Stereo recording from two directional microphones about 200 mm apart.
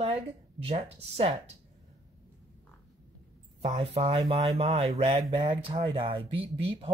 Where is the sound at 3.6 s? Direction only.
30° right (ahead or behind).